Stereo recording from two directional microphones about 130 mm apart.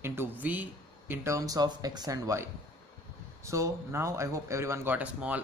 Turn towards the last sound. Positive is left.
turn(degrees=-10)  # may be behind; listen again after turning